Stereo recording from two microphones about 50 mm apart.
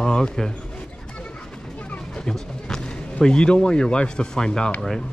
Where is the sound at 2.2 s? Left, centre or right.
Centre.